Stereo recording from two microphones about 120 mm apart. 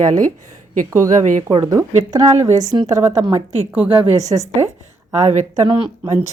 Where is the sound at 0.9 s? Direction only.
25° right (ahead or behind).